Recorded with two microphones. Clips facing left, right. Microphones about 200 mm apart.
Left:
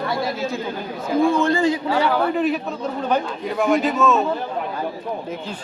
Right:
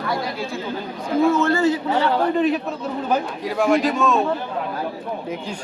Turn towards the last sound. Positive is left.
turn(degrees=0)  # may be behind; listen again after turning